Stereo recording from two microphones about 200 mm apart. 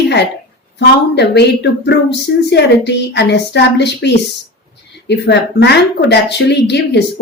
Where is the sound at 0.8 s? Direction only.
55° left (ahead or behind).